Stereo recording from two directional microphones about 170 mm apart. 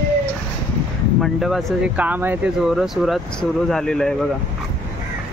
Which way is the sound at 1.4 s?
5° right (ahead or behind).